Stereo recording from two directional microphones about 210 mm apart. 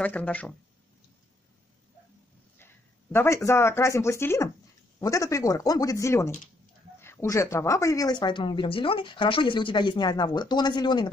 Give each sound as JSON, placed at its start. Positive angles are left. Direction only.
{"t": 0.0, "sound": "speech", "side_deg": 5}
{"t": 2.6, "sound": "speech", "side_deg": 10}